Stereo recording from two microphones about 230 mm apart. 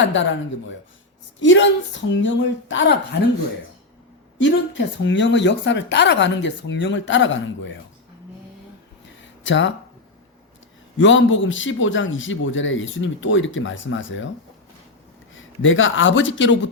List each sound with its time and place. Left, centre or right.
0.0 s speech: left
4.4 s speech: left
9.2 s a sound: left
10.9 s a man's voice: left
15.4 s a man's voice: left